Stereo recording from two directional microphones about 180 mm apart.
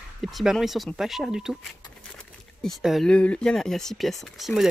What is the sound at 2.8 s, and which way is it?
Speech, centre (ahead or behind).